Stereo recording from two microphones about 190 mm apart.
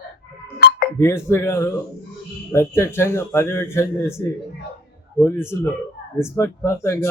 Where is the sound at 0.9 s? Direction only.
15° left (ahead or behind).